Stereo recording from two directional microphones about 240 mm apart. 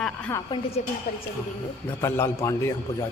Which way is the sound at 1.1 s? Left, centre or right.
Left.